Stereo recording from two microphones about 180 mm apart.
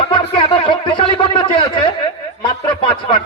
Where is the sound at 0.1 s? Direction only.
30° left (ahead or behind).